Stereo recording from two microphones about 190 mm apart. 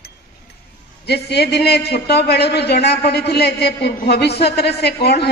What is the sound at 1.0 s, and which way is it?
A man's voice, 60° left (ahead or behind).